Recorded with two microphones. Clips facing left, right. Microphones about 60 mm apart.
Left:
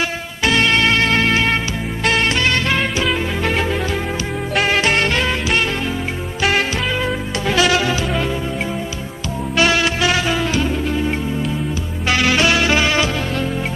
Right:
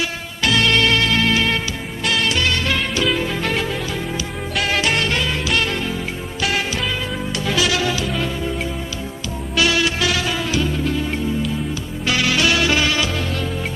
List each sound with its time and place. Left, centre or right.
0.4 s music: left
4.6 s music: left
7.4 s music: left
9.6 s music: left
12.1 s music: left